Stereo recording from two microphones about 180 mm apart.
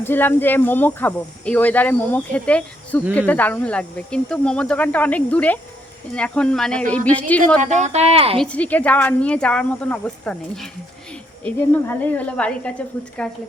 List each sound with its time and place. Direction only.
0.0 s speech: 10° left (ahead or behind)
7.6 s speech: 40° right (ahead or behind)
8.4 s a woman's voice: 5° left (ahead or behind)